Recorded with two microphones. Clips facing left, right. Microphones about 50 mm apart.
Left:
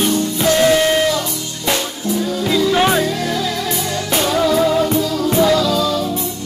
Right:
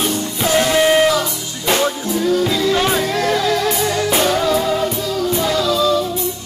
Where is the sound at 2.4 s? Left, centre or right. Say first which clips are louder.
Left 2 dB; centre.